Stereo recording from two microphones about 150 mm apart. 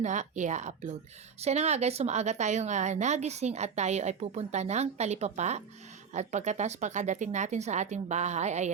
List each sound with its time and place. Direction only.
0.0 s a woman's voice: 55° right (ahead or behind)